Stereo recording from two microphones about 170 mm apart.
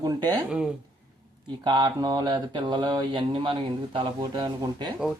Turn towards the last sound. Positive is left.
turn(degrees=-30)  # may be behind; listen again after turning